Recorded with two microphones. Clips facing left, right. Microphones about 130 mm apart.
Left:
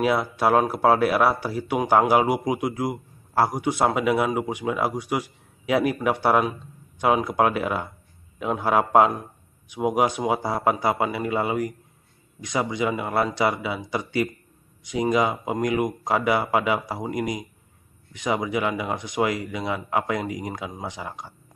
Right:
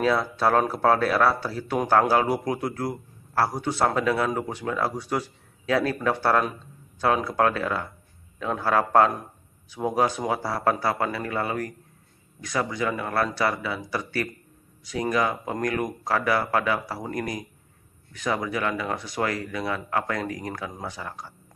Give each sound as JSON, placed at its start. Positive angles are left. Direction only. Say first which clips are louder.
{"t": 0.0, "sound": "a man's voice", "louder": "left 1 dB", "side_deg": 15}